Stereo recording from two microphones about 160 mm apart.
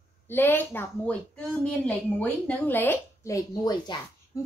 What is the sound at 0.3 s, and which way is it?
A woman's voice, 10° left (ahead or behind).